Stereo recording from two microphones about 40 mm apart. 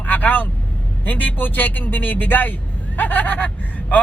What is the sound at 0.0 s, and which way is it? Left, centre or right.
Vehicle, left.